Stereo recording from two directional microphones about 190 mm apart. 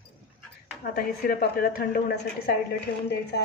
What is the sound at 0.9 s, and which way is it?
A woman's voice, 55° left (ahead or behind).